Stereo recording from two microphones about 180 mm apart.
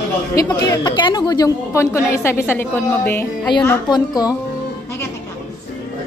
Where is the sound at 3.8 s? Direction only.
20° left (ahead or behind).